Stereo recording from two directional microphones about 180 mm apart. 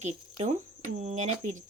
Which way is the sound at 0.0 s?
40° right (ahead or behind).